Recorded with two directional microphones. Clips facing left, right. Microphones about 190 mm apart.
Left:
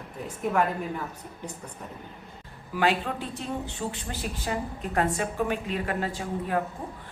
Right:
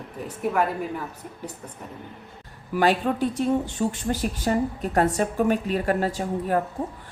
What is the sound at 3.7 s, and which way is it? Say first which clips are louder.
A woman's voice: right 8 dB; 45° right (ahead or behind).